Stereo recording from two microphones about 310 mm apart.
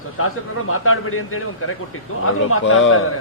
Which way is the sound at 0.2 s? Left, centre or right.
Left.